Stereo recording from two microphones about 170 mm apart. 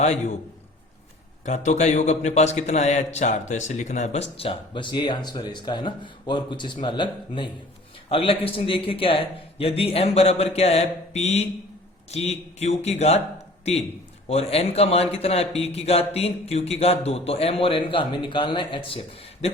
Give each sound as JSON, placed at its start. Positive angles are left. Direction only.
{"t": 0.0, "sound": "a man's voice", "side_deg": 40}
{"t": 1.5, "sound": "a man's voice", "side_deg": 45}
{"t": 14.3, "sound": "a man's voice", "side_deg": 35}